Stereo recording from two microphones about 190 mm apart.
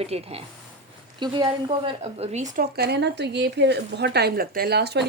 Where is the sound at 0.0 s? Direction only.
30° right (ahead or behind).